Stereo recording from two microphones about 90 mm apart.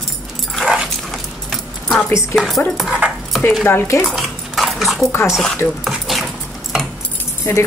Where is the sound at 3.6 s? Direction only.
25° left (ahead or behind).